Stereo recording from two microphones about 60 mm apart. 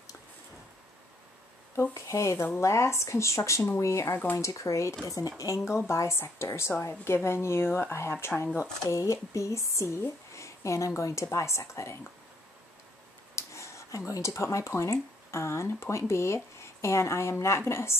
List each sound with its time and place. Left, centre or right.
1.8 s a woman's voice: left
5.0 s speech: left
5.9 s a woman's voice: left
8.8 s a woman's voice: left
13.4 s a woman's voice: left